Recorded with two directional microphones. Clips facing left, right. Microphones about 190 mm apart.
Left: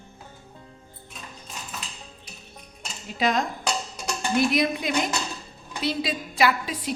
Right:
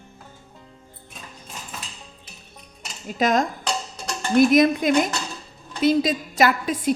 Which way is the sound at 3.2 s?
45° right (ahead or behind).